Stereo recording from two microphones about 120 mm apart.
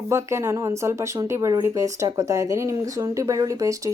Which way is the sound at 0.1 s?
25° right (ahead or behind).